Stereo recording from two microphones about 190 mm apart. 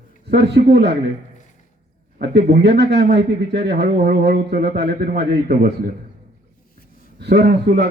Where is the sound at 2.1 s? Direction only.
55° right (ahead or behind).